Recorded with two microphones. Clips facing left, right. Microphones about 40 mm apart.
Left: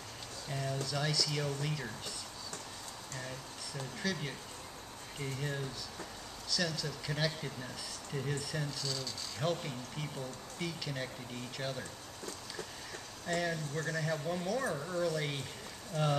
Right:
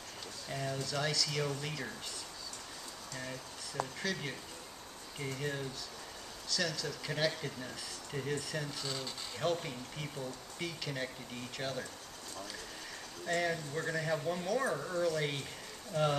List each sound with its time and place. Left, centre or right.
0.5 s speech: centre
4.0 s speech: centre
8.7 s speech: right
9.4 s speech: centre
13.3 s speech: centre